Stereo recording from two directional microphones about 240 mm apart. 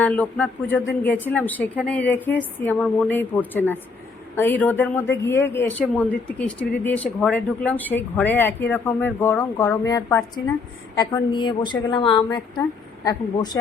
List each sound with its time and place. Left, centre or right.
0.0 s a woman's voice: centre